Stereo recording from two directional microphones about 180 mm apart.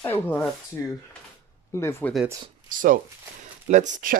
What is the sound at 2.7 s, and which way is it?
Speech, 50° right (ahead or behind).